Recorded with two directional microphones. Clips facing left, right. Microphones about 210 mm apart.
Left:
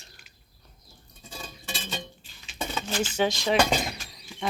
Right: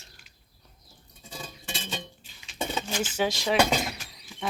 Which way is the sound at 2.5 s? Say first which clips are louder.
Left 1 dB; 15° right (ahead or behind).